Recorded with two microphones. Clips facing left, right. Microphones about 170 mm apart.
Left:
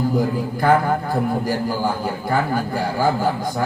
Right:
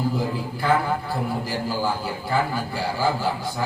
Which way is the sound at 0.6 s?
50° left (ahead or behind).